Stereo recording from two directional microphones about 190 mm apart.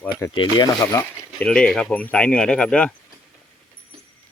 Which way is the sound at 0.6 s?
20° left (ahead or behind).